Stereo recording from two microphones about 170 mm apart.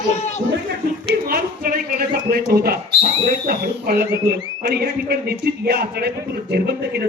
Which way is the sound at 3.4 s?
60° right (ahead or behind).